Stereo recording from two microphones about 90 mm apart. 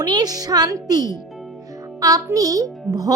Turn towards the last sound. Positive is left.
turn(degrees=-40)  # may be behind; listen again after turning